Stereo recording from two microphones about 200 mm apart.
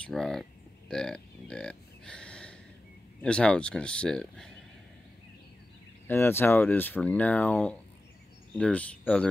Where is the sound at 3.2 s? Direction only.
5° left (ahead or behind).